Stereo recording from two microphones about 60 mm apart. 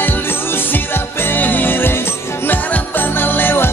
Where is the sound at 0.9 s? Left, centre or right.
Left.